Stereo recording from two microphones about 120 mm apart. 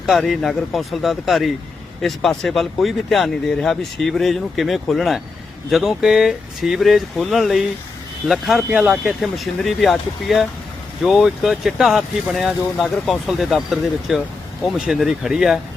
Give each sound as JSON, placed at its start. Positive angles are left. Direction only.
{"t": 0.0, "sound": "speech", "side_deg": 0}